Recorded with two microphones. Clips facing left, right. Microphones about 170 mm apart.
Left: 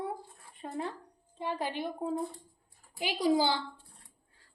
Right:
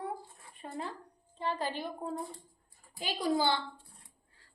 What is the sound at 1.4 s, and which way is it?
Speech, 10° left (ahead or behind).